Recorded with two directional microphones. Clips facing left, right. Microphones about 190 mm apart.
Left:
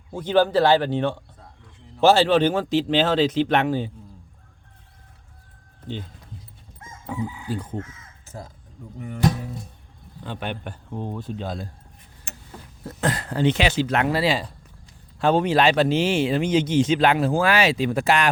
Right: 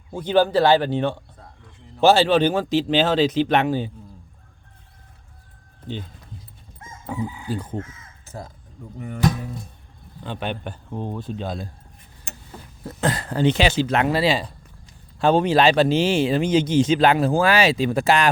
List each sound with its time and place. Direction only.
0.1 s speech: 10° right (ahead or behind)
7.5 s speech: 40° right (ahead or behind)
8.2 s caw: 80° right
10.2 s speech: 25° right (ahead or behind)
12.8 s speech: 30° right (ahead or behind)